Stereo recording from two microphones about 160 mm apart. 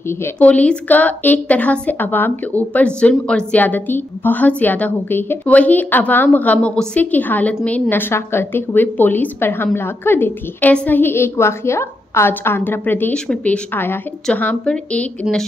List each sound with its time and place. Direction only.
0.1 s speech: 10° left (ahead or behind)